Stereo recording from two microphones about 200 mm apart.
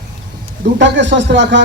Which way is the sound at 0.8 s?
60° right (ahead or behind).